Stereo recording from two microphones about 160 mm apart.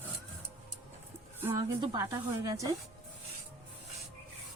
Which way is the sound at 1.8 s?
25° right (ahead or behind).